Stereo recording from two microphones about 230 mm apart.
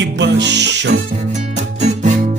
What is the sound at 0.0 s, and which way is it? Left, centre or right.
Music, right.